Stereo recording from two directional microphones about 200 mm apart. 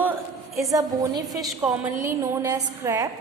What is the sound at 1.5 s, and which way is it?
A woman's voice, 5° right (ahead or behind).